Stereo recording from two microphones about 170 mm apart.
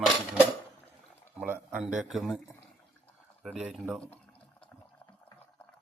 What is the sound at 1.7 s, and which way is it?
Speech, 5° right (ahead or behind).